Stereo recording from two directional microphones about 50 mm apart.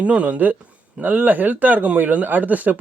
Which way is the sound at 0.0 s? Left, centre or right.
Right.